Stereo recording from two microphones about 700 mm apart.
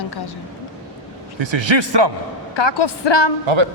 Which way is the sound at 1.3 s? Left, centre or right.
Right.